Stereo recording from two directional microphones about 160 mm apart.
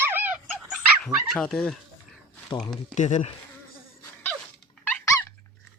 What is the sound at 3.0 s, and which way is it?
Speech, 45° left (ahead or behind).